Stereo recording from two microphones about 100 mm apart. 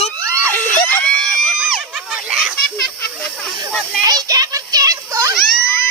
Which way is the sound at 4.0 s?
35° right (ahead or behind).